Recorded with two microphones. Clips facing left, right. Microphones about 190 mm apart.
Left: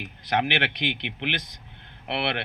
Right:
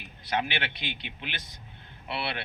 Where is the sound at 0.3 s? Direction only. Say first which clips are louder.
Left 5 dB; 80° left.